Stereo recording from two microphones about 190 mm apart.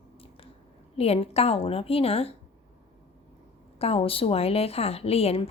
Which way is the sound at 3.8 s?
30° left (ahead or behind).